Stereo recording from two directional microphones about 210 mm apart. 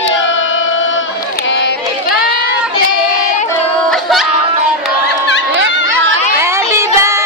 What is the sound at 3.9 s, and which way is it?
Crowd, centre (ahead or behind).